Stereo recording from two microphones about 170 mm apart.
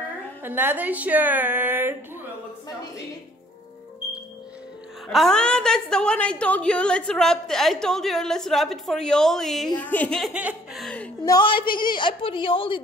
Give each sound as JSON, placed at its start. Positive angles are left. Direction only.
{"t": 0.4, "sound": "speech", "side_deg": -10}
{"t": 5.0, "sound": "a woman's voice", "side_deg": 0}
{"t": 10.3, "sound": "music", "side_deg": -5}
{"t": 11.2, "sound": "a woman's voice", "side_deg": 25}